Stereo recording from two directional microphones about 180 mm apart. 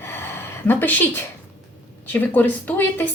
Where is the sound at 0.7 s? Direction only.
10° left (ahead or behind).